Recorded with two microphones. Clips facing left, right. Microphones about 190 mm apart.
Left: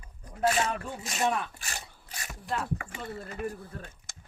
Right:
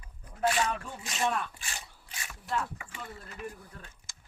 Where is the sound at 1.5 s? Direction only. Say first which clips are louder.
Left 2 dB; 40° left (ahead or behind).